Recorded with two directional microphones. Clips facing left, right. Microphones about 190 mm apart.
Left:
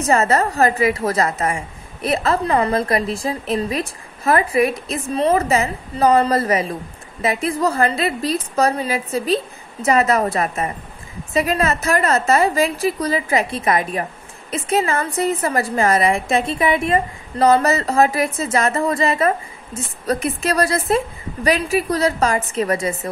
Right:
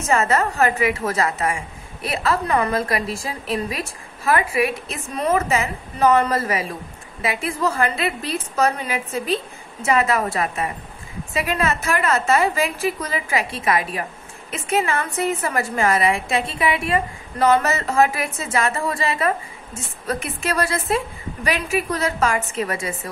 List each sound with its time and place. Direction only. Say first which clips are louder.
0.0 s a woman's voice: left 3 dB; 35° left (ahead or behind)